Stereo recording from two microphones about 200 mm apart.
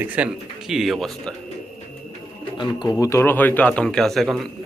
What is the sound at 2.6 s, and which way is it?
A man's voice, 20° left (ahead or behind).